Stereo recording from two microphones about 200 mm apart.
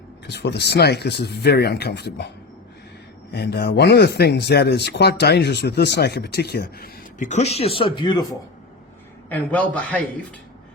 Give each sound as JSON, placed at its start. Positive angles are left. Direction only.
{"t": 0.3, "sound": "speech", "side_deg": 55}
{"t": 3.3, "sound": "speech", "side_deg": 55}
{"t": 9.3, "sound": "a man's voice", "side_deg": 5}